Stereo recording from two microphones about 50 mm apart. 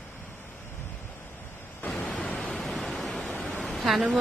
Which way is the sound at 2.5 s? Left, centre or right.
Centre.